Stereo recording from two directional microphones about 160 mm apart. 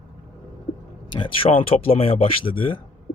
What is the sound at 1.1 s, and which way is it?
Speech, 30° left (ahead or behind).